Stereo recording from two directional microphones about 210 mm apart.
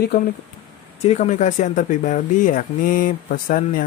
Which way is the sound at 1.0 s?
30° left (ahead or behind).